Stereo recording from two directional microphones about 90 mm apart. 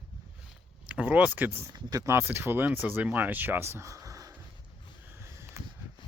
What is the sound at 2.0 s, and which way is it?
Speech, 25° right (ahead or behind).